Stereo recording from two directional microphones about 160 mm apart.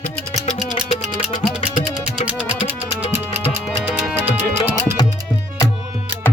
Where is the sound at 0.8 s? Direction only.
5° right (ahead or behind).